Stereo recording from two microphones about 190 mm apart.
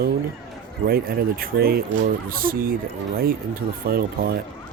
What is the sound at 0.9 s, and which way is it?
Speech, 55° right (ahead or behind).